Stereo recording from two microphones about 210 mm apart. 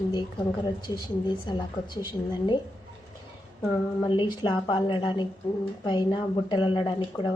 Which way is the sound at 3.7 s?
25° left (ahead or behind).